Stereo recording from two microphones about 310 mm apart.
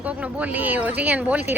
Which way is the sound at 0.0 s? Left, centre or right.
Centre.